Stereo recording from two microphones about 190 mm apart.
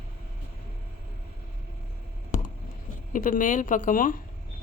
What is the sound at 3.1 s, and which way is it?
Speech, 45° left (ahead or behind).